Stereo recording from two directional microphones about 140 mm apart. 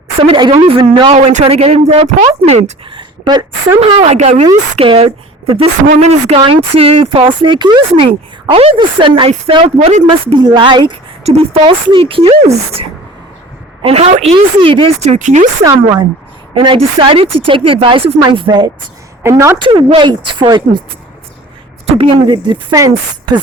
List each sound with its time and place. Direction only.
0.2 s speech: 40° right (ahead or behind)
1.1 s speech: 55° right (ahead or behind)
2.9 s a sound: 30° right (ahead or behind)
3.8 s speech: 50° right (ahead or behind)
10.4 s speech: 35° right (ahead or behind)
11.2 s speech: 45° right (ahead or behind)
15.6 s a woman's voice: 25° right (ahead or behind)
16.6 s speech: 35° right (ahead or behind)
19.2 s a woman's voice: 20° right (ahead or behind)
19.5 s speech: 35° right (ahead or behind)
21.8 s speech: 40° right (ahead or behind)